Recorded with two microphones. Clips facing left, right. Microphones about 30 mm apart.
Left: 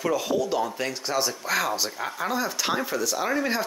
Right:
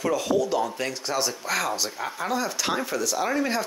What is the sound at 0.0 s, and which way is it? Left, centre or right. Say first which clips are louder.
Speech: right 1 dB; centre.